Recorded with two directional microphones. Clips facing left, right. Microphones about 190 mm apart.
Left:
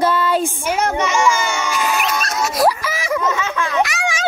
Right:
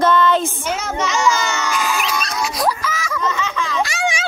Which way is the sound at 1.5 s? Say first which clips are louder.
Left 1 dB; 5° left (ahead or behind).